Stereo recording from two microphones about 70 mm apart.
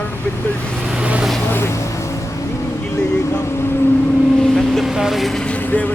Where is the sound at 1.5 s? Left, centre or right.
Left.